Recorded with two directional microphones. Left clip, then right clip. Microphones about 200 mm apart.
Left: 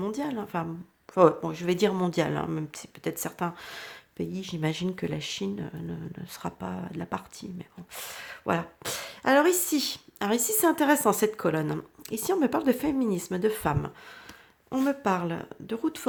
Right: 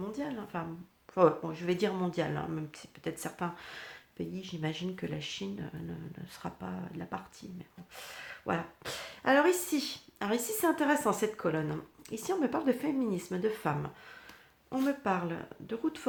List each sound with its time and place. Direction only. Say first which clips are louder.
0.0 s speech: left 7 dB; 45° left (ahead or behind)